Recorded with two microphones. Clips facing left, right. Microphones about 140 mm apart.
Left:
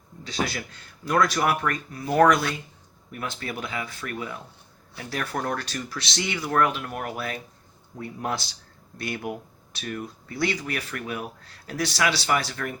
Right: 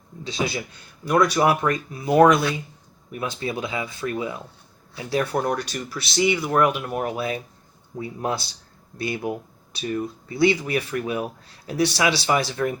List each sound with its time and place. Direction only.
0.3 s speech: 15° right (ahead or behind)
1.4 s speech: 25° right (ahead or behind)
10.3 s speech: 15° right (ahead or behind)